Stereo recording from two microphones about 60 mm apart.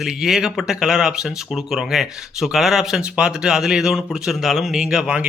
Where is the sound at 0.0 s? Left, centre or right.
Centre.